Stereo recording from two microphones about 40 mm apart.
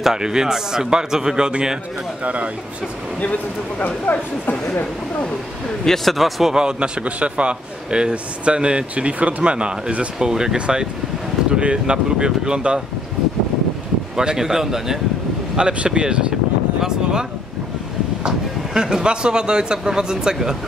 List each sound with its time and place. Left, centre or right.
0.0 s a man's voice: centre
2.2 s speech: right
3.8 s speech: left
5.9 s speech: centre
6.5 s a man's voice: right
14.1 s a man's voice: centre
15.5 s a man's voice: right